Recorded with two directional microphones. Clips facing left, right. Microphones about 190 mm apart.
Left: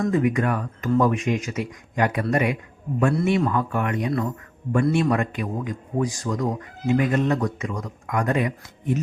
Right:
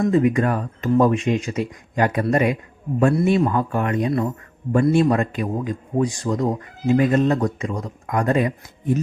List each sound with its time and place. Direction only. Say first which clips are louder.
0.1 s a man's voice: right 3 dB; 30° right (ahead or behind)